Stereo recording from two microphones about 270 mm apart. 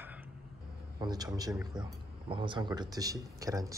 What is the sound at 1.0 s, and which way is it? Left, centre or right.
A man's voice, centre.